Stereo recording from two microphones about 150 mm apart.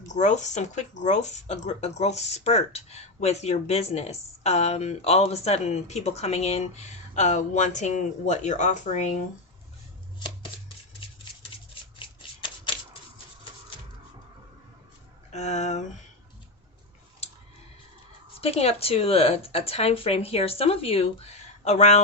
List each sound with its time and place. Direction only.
0.1 s speech: 50° left (ahead or behind)
11.9 s shuffling cards: 35° left (ahead or behind)
15.3 s speech: 50° left (ahead or behind)
18.3 s a woman's voice: 40° left (ahead or behind)